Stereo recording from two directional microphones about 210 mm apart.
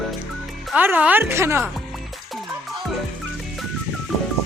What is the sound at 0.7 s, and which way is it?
Speech, 10° right (ahead or behind).